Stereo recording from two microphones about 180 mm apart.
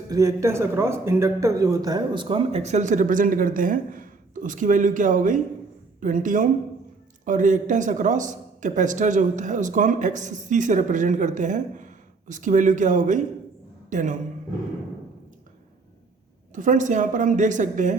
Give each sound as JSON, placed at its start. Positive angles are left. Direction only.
{"t": 0.1, "sound": "speech", "side_deg": -20}
{"t": 16.6, "sound": "speech", "side_deg": -45}